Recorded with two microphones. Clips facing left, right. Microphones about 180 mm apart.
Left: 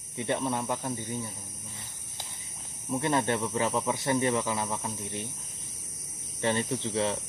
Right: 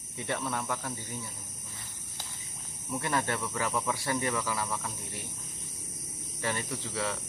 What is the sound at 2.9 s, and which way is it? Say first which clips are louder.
Speech: left 4 dB; 25° left (ahead or behind).